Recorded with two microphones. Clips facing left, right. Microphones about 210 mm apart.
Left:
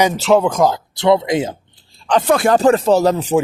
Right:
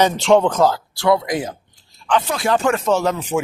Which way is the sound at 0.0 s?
5° left (ahead or behind).